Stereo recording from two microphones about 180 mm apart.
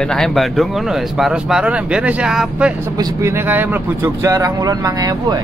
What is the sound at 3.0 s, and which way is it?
Speech, 15° right (ahead or behind).